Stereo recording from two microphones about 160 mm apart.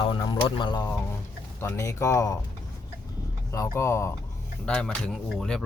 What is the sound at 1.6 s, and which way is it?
Speech, 15° left (ahead or behind).